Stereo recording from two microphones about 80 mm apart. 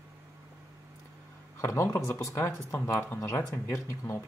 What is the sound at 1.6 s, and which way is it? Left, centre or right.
Speech, left.